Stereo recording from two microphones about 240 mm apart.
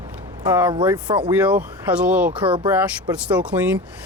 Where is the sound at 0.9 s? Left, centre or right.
Centre.